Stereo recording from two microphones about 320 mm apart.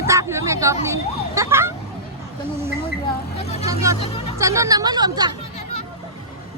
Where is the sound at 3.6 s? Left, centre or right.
Centre.